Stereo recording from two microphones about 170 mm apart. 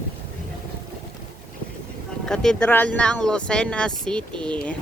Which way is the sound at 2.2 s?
5° left (ahead or behind).